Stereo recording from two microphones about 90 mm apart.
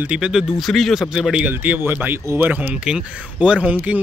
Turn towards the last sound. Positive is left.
turn(degrees=-15)  # may be behind; listen again after turning